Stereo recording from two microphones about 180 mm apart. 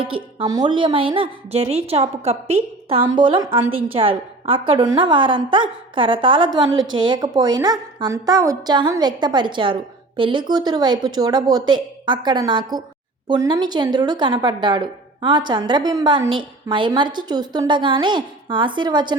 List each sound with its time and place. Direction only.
0.0 s a woman's voice: 30° right (ahead or behind)
3.0 s speech: 25° right (ahead or behind)